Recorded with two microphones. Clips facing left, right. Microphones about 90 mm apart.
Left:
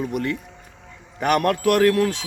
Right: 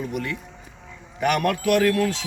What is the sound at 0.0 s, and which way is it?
A man's voice, 45° left (ahead or behind).